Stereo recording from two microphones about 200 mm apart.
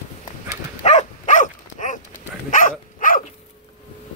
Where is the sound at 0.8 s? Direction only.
35° left (ahead or behind).